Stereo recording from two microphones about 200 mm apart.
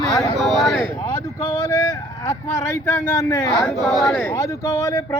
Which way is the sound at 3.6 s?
Centre (ahead or behind).